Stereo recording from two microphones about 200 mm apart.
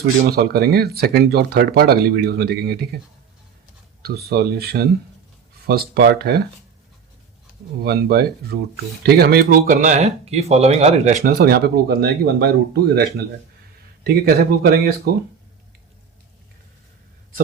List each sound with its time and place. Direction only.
0.3 s speech: 50° right (ahead or behind)
4.0 s speech: 50° right (ahead or behind)
7.8 s speech: 50° right (ahead or behind); by 11.3 s 35° right (ahead or behind)
11.3 s speech: 50° right (ahead or behind)